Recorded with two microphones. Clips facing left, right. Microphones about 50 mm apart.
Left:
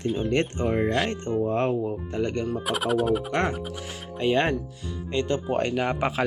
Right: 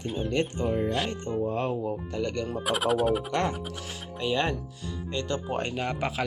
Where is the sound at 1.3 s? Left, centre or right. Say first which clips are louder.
Left 4 dB; left.